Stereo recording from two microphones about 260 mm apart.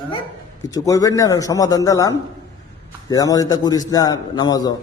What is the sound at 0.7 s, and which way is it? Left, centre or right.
A man's voice, centre.